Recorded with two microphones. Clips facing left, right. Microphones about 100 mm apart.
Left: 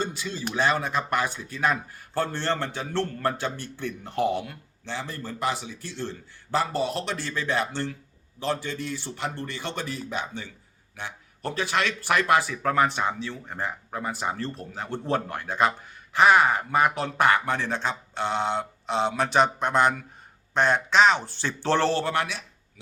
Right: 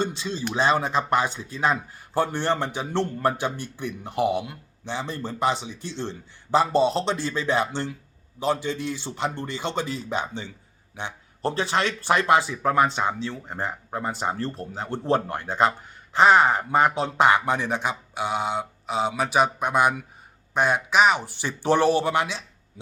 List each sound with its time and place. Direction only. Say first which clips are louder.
0.0 s speech: right 3 dB; 25° right (ahead or behind)